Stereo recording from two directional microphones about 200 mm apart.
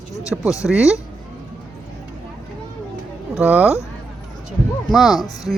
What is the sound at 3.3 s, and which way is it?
Speech, 5° right (ahead or behind).